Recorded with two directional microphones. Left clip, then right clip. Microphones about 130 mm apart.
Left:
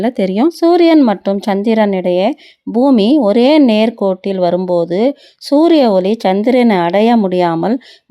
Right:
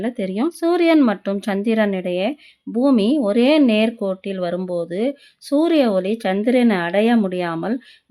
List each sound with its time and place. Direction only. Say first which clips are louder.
0.0 s a woman's voice: left 9 dB; 50° left (ahead or behind)